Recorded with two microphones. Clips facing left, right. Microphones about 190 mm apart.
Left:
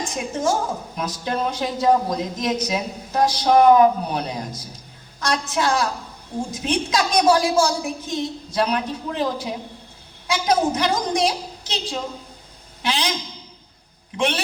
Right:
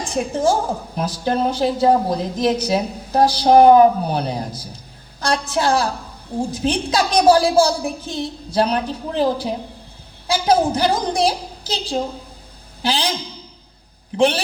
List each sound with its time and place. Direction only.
0.1 s a woman's voice: 30° right (ahead or behind)
14.2 s a woman's voice: 30° right (ahead or behind)